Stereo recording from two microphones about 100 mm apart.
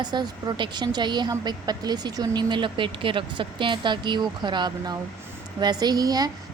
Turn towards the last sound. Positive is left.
turn(degrees=-40)  # may be behind; listen again after turning